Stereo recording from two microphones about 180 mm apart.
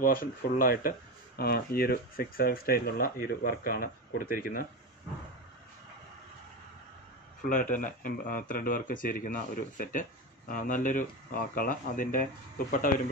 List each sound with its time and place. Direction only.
0.0 s speech: 50° left (ahead or behind)
7.4 s speech: 45° left (ahead or behind)